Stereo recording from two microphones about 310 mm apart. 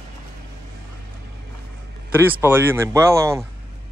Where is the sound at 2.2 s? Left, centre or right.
Centre.